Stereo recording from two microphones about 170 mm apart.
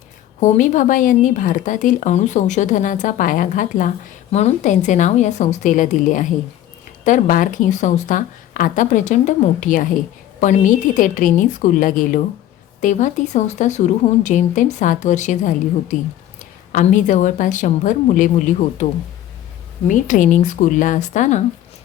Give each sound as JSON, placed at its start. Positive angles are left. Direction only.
{"t": 0.3, "sound": "speech", "side_deg": 45}
{"t": 19.9, "sound": "speech", "side_deg": 50}